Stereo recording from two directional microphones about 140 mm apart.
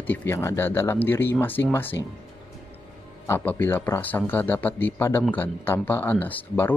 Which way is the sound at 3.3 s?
15° left (ahead or behind).